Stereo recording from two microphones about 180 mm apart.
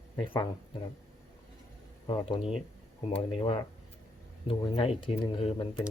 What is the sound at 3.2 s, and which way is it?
Speech, 30° left (ahead or behind).